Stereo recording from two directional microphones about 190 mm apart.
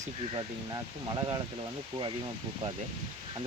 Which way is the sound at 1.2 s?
25° right (ahead or behind).